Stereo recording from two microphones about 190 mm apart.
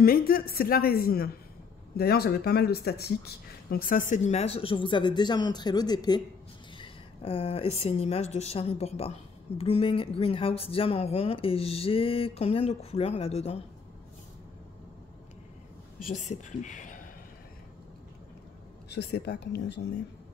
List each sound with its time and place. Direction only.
0.0 s a woman's voice: 50° left (ahead or behind); by 13.6 s 30° left (ahead or behind)
16.1 s speech: 40° left (ahead or behind)
18.9 s speech: 60° left (ahead or behind)